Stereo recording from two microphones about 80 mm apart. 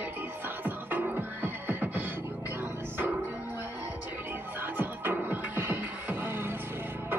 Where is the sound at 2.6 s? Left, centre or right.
Right.